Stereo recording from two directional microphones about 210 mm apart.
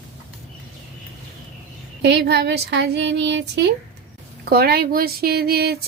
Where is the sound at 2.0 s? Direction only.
50° right (ahead or behind).